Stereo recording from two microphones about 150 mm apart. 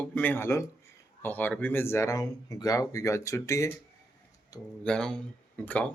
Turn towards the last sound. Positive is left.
turn(degrees=10)  # may be behind; listen again after turning